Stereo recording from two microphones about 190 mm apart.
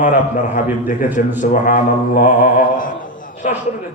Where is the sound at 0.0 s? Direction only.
40° left (ahead or behind).